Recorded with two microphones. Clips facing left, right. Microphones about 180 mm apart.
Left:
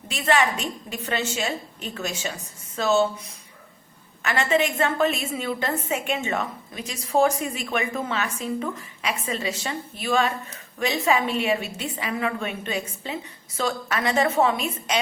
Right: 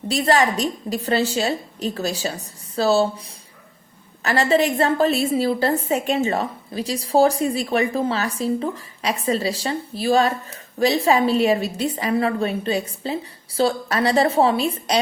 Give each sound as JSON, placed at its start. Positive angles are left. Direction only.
{"t": 0.1, "sound": "a woman's voice", "side_deg": -35}
{"t": 4.2, "sound": "a woman's voice", "side_deg": -35}